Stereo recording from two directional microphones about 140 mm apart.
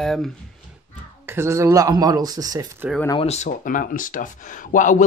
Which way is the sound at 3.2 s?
50° left (ahead or behind).